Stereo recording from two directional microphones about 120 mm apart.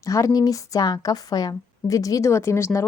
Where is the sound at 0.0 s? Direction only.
25° left (ahead or behind).